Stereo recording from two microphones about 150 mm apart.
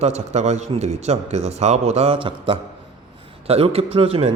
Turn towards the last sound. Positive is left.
turn(degrees=-40)  # may be behind; listen again after turning